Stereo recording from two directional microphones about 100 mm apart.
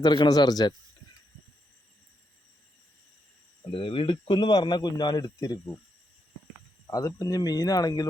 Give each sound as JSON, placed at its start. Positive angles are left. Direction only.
{"t": 0.0, "sound": "speech", "side_deg": 45}
{"t": 3.7, "sound": "speech", "side_deg": 60}
{"t": 6.9, "sound": "speech", "side_deg": 35}